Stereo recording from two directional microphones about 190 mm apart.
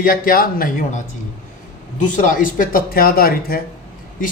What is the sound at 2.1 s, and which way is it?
Speech, 45° left (ahead or behind).